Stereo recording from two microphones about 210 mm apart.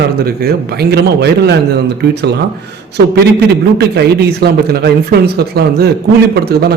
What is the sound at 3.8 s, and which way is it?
A man's voice, 50° right (ahead or behind).